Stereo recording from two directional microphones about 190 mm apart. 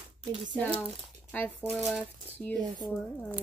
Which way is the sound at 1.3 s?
10° left (ahead or behind).